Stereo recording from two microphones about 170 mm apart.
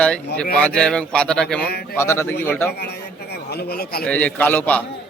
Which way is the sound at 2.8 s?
70° left (ahead or behind).